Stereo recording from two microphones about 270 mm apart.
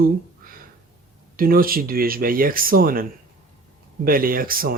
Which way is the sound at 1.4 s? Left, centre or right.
Right.